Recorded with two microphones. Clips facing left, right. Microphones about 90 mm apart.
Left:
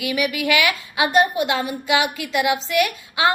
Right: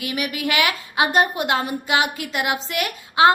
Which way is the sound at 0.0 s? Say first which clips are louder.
Left 3 dB; 40° right (ahead or behind).